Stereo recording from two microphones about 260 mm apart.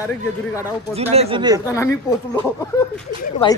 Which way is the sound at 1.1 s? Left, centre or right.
Right.